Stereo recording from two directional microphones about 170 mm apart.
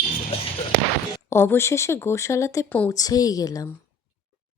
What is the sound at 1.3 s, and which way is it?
A woman's voice, 15° left (ahead or behind).